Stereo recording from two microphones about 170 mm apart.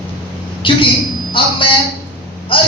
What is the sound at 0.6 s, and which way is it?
Speech, 30° left (ahead or behind).